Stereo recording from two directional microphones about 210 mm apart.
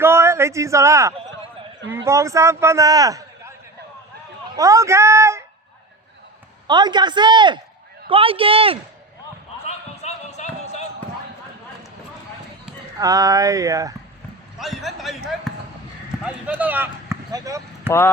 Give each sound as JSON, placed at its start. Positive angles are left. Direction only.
{"t": 0.0, "sound": "a sound", "side_deg": -10}
{"t": 2.0, "sound": "a man's voice", "side_deg": -15}
{"t": 4.5, "sound": "speech", "side_deg": -15}
{"t": 6.7, "sound": "a man's voice", "side_deg": -20}
{"t": 9.6, "sound": "basketball bounce", "side_deg": 30}
{"t": 13.0, "sound": "a man's voice", "side_deg": -15}
{"t": 14.6, "sound": "speech", "side_deg": 0}